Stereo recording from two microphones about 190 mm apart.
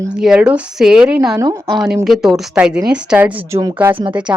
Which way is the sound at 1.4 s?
20° right (ahead or behind).